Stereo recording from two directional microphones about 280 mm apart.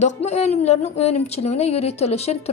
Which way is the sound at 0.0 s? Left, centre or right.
Left.